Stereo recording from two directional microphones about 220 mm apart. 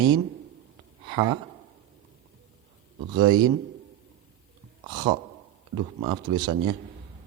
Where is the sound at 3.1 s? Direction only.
20° right (ahead or behind).